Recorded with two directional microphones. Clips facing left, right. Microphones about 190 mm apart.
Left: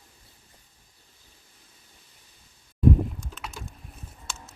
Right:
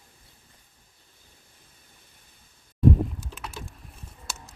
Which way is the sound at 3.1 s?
Centre (ahead or behind).